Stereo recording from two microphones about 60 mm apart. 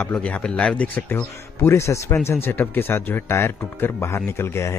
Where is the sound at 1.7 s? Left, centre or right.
Left.